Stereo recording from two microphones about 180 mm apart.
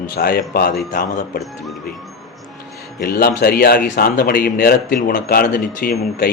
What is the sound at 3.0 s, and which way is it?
Speech, 60° left (ahead or behind).